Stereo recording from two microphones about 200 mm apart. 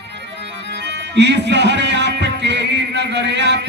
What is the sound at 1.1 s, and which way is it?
Music, 60° right (ahead or behind).